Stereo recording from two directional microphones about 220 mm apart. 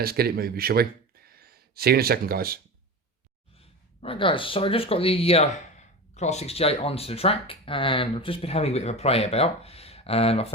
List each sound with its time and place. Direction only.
0.0 s speech: 45° right (ahead or behind)
3.6 s speech: 25° left (ahead or behind)